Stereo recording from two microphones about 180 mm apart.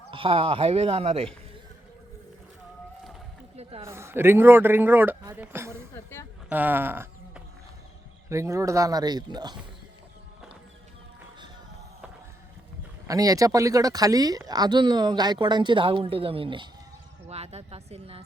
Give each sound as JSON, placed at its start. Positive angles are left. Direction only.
{"t": 0.1, "sound": "speech", "side_deg": -30}
{"t": 3.5, "sound": "a sound", "side_deg": -35}
{"t": 3.8, "sound": "a man's voice", "side_deg": -15}
{"t": 5.9, "sound": "a woman's voice", "side_deg": 15}
{"t": 6.5, "sound": "a sound", "side_deg": -10}
{"t": 8.3, "sound": "speech", "side_deg": -15}
{"t": 13.1, "sound": "a woman's voice", "side_deg": -20}